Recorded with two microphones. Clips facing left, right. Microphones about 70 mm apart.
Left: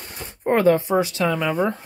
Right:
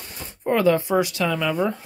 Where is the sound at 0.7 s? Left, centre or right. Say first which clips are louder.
Left 1 dB; left.